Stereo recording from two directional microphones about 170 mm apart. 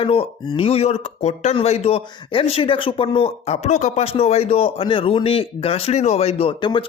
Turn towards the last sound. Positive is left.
turn(degrees=30)  # may be behind; listen again after turning